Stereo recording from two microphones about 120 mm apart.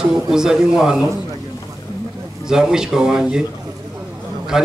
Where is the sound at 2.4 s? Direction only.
5° right (ahead or behind).